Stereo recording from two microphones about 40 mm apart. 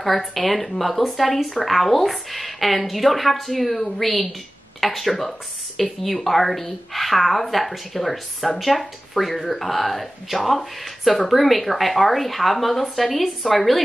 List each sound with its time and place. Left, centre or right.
0.0 s speech: centre